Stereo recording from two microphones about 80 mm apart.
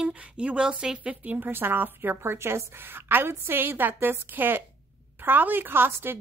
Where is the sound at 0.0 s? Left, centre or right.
Centre.